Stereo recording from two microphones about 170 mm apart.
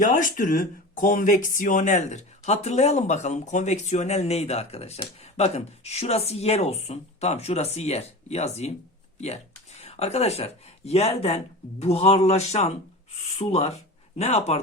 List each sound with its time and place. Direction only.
0.0 s speech: 50° left (ahead or behind)